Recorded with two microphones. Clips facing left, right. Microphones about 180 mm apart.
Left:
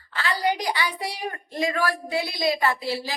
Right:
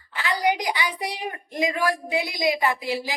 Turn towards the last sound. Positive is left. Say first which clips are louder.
# right 1 dB
turn(degrees=-15)  # may be behind; listen again after turning